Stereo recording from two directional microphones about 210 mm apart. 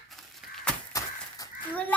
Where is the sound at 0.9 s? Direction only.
15° left (ahead or behind).